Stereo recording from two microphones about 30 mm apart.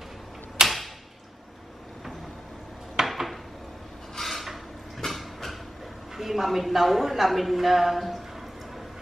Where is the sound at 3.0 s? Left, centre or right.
Centre.